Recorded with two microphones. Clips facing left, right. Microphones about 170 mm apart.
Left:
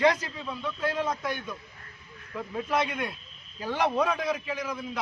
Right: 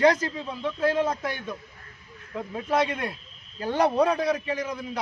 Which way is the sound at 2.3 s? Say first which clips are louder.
Right 3 dB; 25° right (ahead or behind).